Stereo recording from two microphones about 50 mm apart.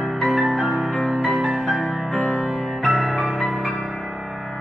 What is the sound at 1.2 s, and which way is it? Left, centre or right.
Music, centre.